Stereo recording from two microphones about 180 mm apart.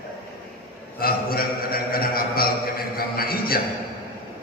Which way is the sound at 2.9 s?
55° left (ahead or behind).